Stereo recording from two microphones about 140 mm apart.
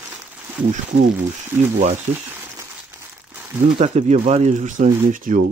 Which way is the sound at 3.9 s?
55° right (ahead or behind).